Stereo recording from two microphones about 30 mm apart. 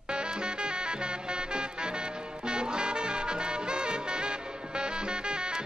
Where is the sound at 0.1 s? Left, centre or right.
Right.